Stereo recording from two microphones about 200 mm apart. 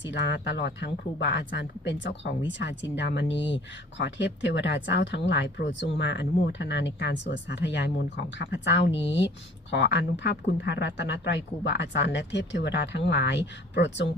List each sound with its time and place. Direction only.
0.0 s speech: 60° left (ahead or behind)